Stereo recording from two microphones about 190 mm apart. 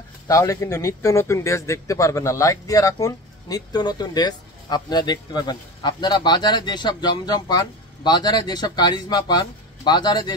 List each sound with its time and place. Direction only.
0.3 s speech: 15° left (ahead or behind)